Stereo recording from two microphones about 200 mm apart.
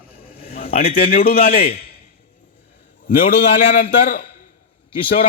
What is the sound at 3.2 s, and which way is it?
Speech, 40° left (ahead or behind).